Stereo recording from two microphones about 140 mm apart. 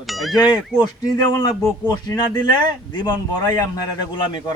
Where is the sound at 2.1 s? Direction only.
30° left (ahead or behind).